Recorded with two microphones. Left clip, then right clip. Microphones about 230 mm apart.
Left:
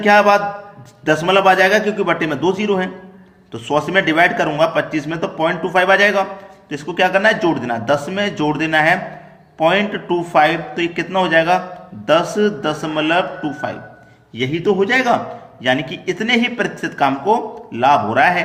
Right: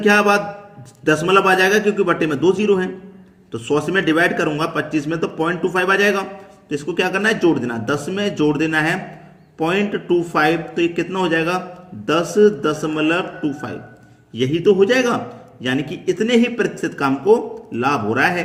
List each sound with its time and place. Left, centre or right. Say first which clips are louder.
0.0 s speech: left 3 dB; centre